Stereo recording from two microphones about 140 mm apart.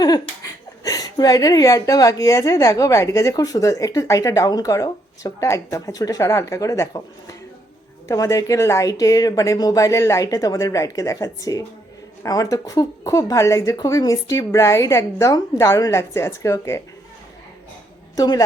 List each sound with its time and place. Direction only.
0.9 s a woman's voice: 25° left (ahead or behind)
18.2 s a woman's voice: 25° left (ahead or behind)